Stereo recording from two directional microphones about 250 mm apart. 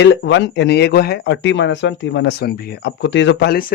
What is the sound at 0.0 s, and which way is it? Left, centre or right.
Speech, left.